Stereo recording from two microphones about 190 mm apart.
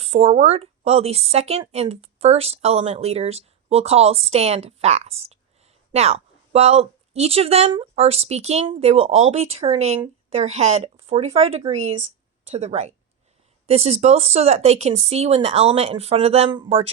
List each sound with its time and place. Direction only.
0.0 s a woman's voice: 35° right (ahead or behind)